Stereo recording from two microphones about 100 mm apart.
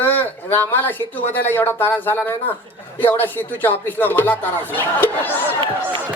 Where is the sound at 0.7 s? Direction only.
20° left (ahead or behind).